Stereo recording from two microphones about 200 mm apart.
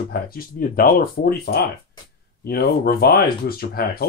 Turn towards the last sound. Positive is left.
turn(degrees=50)  # may be behind; listen again after turning